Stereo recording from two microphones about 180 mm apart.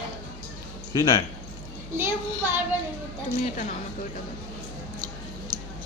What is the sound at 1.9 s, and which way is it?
Speech, 10° right (ahead or behind).